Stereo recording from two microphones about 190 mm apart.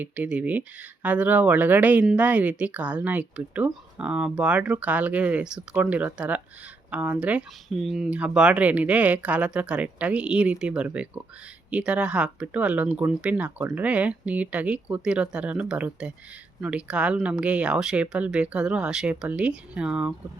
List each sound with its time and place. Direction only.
0.0 s speech: 5° right (ahead or behind)